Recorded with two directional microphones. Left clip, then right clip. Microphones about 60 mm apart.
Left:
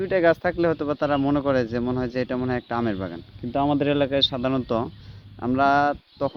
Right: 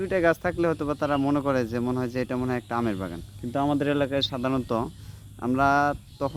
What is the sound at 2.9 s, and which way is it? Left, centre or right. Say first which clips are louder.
Speech: left 2 dB; right.